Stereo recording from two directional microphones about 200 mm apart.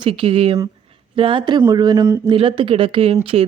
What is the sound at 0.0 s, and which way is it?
Speech, 25° right (ahead or behind).